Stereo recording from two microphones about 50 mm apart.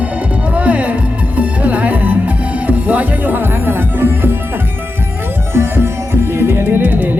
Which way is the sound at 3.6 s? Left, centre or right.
Right.